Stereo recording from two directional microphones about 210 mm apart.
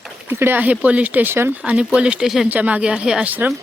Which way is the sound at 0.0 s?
10° right (ahead or behind).